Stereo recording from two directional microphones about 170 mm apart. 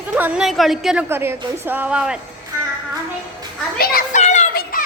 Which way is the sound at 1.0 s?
15° right (ahead or behind).